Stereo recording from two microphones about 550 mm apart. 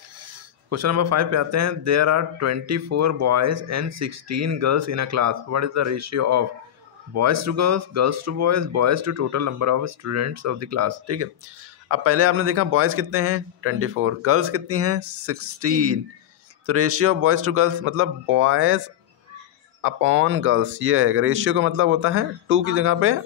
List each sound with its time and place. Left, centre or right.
0.2 s speech: right
19.8 s speech: right